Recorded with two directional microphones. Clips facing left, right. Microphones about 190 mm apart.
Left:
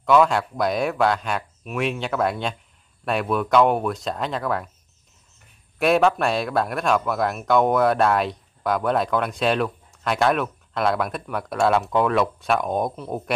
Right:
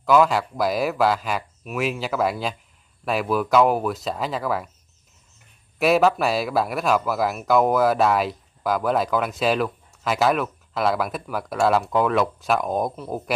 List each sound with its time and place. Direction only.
0.0 s speech: centre (ahead or behind)
5.8 s speech: 5° right (ahead or behind)